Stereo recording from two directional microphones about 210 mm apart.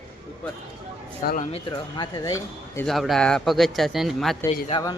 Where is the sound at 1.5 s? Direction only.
20° left (ahead or behind).